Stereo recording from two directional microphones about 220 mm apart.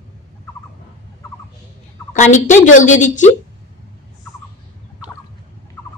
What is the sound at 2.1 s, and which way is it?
A woman's voice, 35° left (ahead or behind).